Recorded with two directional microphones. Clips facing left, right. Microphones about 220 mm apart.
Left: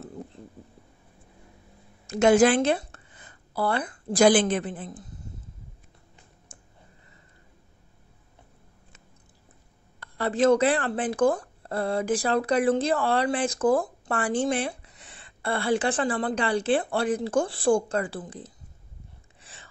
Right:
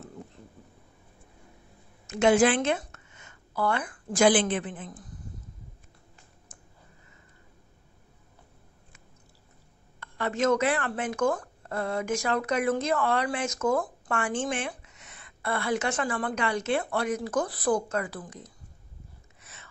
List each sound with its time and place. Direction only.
2.0 s a woman's voice: 40° left (ahead or behind)
6.5 s clicking: 30° left (ahead or behind)
9.9 s speech: 35° left (ahead or behind)
19.4 s a sound: 30° left (ahead or behind)